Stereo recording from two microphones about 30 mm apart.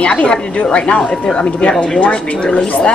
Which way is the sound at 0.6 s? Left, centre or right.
Left.